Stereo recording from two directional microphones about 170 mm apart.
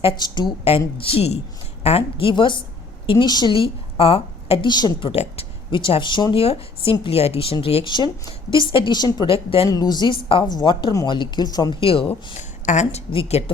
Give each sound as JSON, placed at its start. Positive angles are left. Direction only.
{"t": 0.0, "sound": "a woman's voice", "side_deg": 25}
{"t": 9.6, "sound": "a woman's voice", "side_deg": 25}
{"t": 12.6, "sound": "a woman's voice", "side_deg": 45}